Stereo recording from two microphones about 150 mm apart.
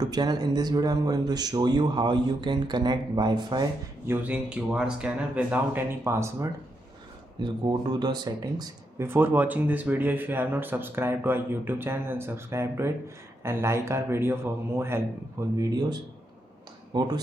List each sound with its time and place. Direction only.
0.0 s speech: 25° right (ahead or behind)
4.0 s speech: 15° right (ahead or behind)
7.4 s speech: 30° right (ahead or behind)
9.0 s speech: 15° right (ahead or behind); by 17.1 s 30° right (ahead or behind)